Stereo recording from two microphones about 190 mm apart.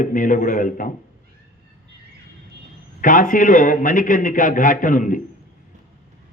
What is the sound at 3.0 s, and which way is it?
A man's voice, 45° left (ahead or behind).